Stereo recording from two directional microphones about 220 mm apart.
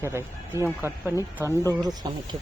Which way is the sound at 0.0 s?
10° right (ahead or behind).